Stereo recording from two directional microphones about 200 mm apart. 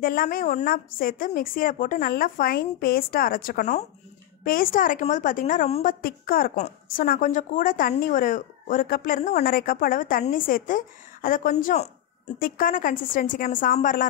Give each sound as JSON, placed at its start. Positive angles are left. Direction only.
{"t": 0.0, "sound": "a woman's voice", "side_deg": 45}